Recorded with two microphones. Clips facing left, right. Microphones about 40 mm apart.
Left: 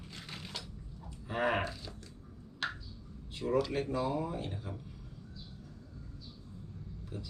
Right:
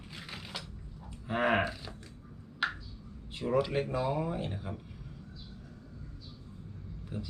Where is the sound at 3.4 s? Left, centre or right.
Right.